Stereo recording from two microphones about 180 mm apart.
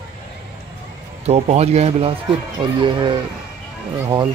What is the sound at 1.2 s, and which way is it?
Speech, 35° right (ahead or behind).